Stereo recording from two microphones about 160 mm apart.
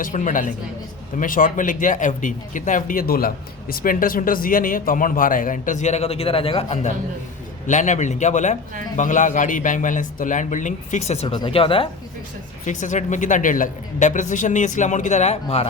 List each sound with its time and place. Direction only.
0.0 s speech: 55° left (ahead or behind); by 11.9 s 35° left (ahead or behind)
12.6 s speech: 50° left (ahead or behind)